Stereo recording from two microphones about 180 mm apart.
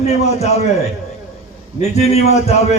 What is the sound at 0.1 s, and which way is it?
Speech, 35° left (ahead or behind).